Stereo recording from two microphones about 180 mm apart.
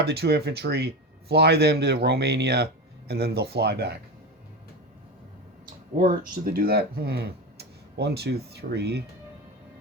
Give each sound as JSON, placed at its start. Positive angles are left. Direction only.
{"t": 0.0, "sound": "speech", "side_deg": -65}
{"t": 6.4, "sound": "speech", "side_deg": -55}